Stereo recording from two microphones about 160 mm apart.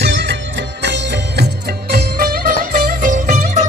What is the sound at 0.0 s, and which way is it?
Music, 90° right.